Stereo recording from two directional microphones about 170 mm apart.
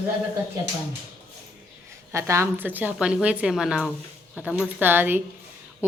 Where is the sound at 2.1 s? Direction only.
15° right (ahead or behind).